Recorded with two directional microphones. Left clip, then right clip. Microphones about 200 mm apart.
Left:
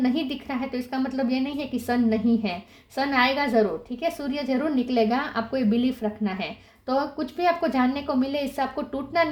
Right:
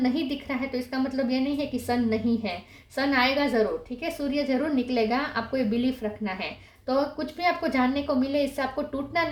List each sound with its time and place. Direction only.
0.0 s a woman's voice: 40° left (ahead or behind)